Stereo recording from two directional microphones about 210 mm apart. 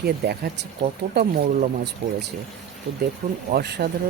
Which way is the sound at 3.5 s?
50° right (ahead or behind).